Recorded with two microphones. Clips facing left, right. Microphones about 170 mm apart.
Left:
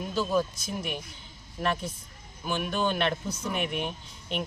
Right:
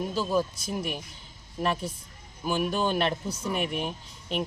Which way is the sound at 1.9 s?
30° right (ahead or behind).